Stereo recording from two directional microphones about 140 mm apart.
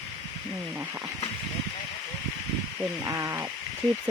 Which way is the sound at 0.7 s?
15° right (ahead or behind).